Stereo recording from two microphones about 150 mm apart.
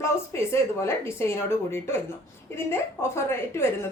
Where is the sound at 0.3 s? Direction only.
15° left (ahead or behind).